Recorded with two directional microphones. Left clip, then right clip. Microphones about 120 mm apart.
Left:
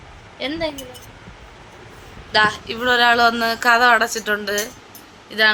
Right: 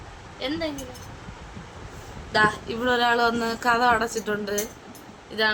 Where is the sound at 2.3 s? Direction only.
30° left (ahead or behind).